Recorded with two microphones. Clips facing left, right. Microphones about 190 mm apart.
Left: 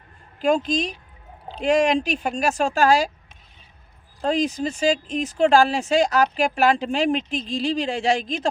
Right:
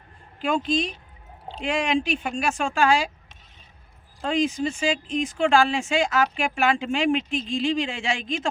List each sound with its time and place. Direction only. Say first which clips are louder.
0.3 s speech: left 3 dB; 40° left (ahead or behind)
4.2 s speech: left 1 dB; 40° left (ahead or behind)